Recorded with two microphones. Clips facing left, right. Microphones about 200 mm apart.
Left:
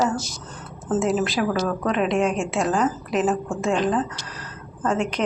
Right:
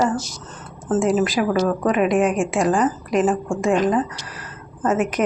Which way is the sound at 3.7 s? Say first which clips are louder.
Right 3 dB; 15° right (ahead or behind).